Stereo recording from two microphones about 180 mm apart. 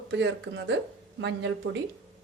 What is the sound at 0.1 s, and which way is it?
Speech, 90° right.